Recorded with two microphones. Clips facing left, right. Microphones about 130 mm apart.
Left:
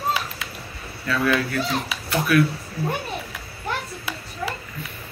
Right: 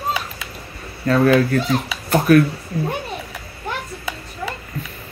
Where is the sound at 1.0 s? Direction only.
40° right (ahead or behind).